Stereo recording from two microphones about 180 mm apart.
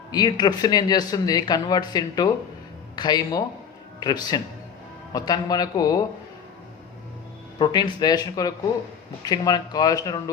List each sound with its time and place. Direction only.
0.1 s speech: 20° left (ahead or behind)
7.6 s speech: 20° left (ahead or behind)